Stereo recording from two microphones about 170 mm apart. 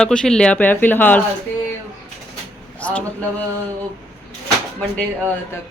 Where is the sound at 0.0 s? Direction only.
5° left (ahead or behind).